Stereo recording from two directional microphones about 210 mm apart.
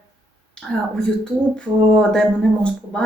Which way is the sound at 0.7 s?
Centre (ahead or behind).